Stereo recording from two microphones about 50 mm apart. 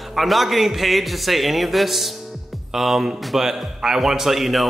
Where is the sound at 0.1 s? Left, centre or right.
Centre.